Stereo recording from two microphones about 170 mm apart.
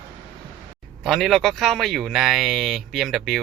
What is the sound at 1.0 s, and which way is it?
Speech, centre (ahead or behind).